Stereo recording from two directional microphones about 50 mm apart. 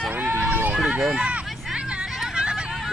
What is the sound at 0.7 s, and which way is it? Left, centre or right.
Run, right.